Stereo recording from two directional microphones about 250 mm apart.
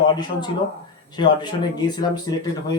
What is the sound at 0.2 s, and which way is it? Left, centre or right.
Speech, centre.